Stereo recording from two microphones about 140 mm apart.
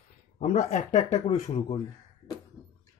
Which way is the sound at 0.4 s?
60° left (ahead or behind).